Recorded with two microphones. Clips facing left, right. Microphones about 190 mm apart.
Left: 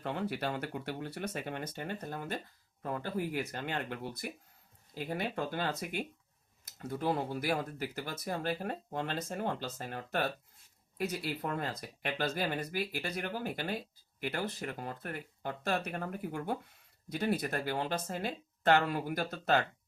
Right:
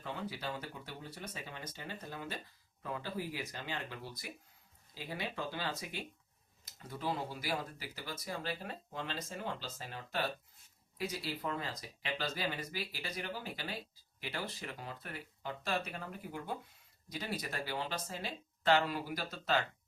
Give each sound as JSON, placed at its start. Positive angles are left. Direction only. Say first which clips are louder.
{"t": 0.0, "sound": "speech", "louder": "left 6 dB", "side_deg": 60}